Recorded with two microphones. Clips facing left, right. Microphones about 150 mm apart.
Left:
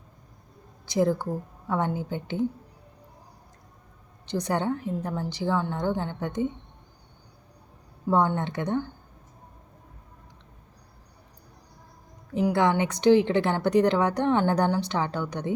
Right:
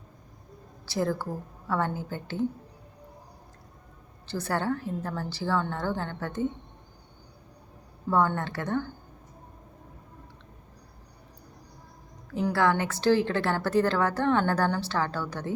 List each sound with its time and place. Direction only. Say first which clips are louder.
0.9 s a woman's voice: left 5 dB; 15° left (ahead or behind)
4.3 s a woman's voice: left 2 dB; 15° left (ahead or behind)
8.0 s a woman's voice: left 2 dB; 15° left (ahead or behind)
12.3 s a woman's voice: left 2 dB; 20° left (ahead or behind)